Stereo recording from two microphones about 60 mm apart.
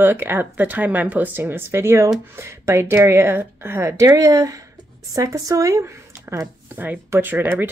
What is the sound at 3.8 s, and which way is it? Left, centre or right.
A woman's voice, right.